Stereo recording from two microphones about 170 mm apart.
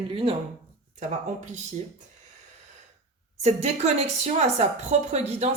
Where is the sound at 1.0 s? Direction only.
45° right (ahead or behind).